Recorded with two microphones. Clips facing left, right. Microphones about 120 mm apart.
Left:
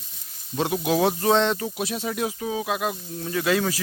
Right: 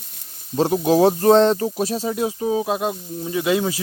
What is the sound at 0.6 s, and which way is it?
Speech, 35° right (ahead or behind).